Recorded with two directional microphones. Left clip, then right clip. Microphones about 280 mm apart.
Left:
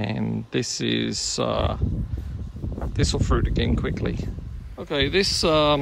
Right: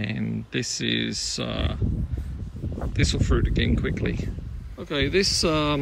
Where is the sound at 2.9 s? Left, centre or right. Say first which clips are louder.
Left 1 dB; centre.